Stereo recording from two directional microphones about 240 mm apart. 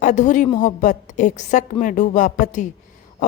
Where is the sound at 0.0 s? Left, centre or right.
Left.